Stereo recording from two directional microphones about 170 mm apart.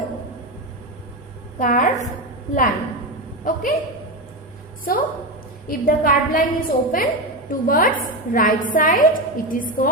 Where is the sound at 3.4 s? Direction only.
50° left (ahead or behind).